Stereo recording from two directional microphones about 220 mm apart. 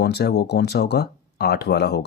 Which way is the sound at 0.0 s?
50° left (ahead or behind).